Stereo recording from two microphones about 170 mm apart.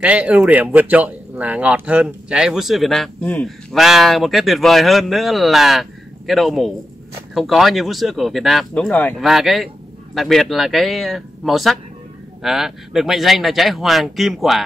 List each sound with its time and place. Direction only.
0.0 s speech: 10° right (ahead or behind)